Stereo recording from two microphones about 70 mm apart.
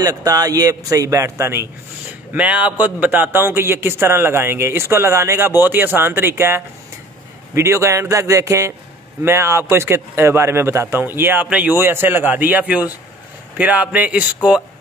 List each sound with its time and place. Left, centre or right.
0.0 s a man's voice: right
2.0 s a man's voice: right
11.4 s speech: centre
11.8 s speech: right; by 14.6 s centre